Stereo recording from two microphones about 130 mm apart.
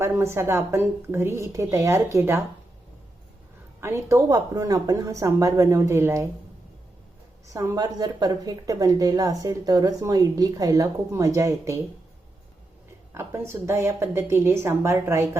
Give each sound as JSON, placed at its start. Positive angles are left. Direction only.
{"t": 0.0, "sound": "a woman's voice", "side_deg": -20}
{"t": 3.8, "sound": "a woman's voice", "side_deg": -20}
{"t": 7.4, "sound": "a woman's voice", "side_deg": -25}
{"t": 13.1, "sound": "a woman's voice", "side_deg": -20}